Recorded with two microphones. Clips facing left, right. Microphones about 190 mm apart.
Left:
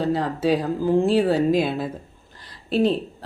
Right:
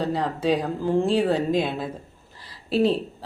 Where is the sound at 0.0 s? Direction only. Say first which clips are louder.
Left 2 dB; centre (ahead or behind).